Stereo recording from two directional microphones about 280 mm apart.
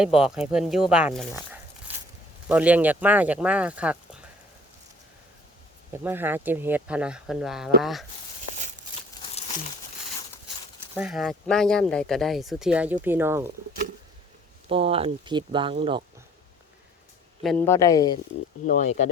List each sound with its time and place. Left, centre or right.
0.0 s speech: centre
2.5 s speech: centre
5.9 s speech: centre
10.9 s speech: centre
14.7 s speech: centre
17.4 s speech: centre
18.6 s speech: left